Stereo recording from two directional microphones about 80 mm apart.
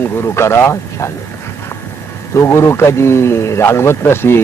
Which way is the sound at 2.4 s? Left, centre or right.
Left.